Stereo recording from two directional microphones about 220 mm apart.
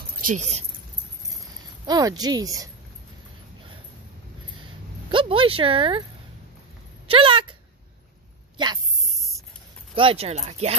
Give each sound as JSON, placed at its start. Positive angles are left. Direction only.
{"t": 0.2, "sound": "speech", "side_deg": -35}
{"t": 1.9, "sound": "speech", "side_deg": -15}
{"t": 5.1, "sound": "speech", "side_deg": -25}
{"t": 7.1, "sound": "speech", "side_deg": -25}
{"t": 9.9, "sound": "speech", "side_deg": -25}